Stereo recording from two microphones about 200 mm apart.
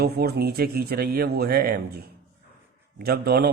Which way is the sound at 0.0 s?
50° right (ahead or behind).